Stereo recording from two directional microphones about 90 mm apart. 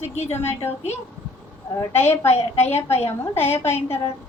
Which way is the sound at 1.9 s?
25° left (ahead or behind).